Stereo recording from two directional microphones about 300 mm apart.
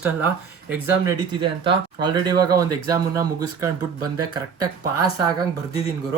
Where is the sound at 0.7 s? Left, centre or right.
Centre.